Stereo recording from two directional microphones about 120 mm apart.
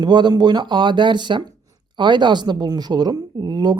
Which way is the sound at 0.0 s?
35° right (ahead or behind).